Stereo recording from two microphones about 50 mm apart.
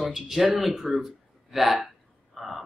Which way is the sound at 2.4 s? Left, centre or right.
Centre.